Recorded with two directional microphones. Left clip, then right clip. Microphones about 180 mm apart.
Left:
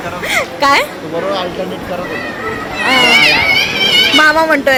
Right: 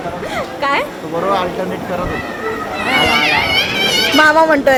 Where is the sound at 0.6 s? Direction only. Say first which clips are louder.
Left 5 dB; 40° left (ahead or behind).